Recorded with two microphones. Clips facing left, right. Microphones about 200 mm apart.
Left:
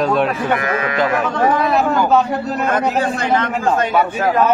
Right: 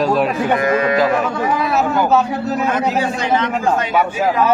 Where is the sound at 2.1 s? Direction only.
5° right (ahead or behind).